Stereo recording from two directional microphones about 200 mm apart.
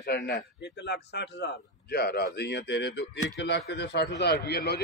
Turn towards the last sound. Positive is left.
turn(degrees=55)  # may be behind; listen again after turning